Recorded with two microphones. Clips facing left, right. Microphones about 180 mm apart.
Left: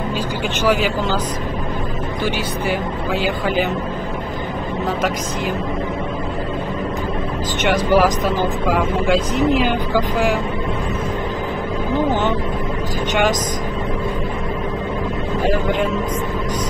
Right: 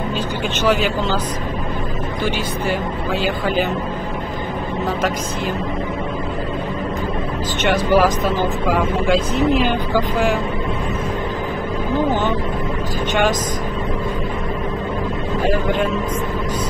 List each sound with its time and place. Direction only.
3.2 s speech: 15° left (ahead or behind)
7.7 s speech: 15° left (ahead or behind)
12.1 s a sound: 15° left (ahead or behind)